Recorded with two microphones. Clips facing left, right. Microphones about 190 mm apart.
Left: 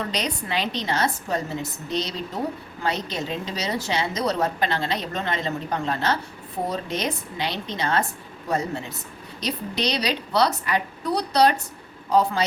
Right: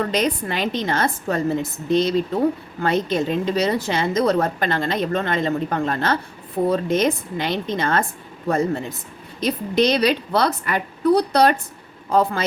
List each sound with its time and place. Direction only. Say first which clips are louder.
0.0 s a woman's voice: right 7 dB; 50° right (ahead or behind)
9.4 s a woman's voice: right 8 dB; 50° right (ahead or behind)